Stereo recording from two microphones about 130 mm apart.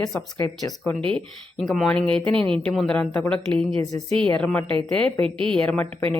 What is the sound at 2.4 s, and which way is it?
Speech, 40° right (ahead or behind).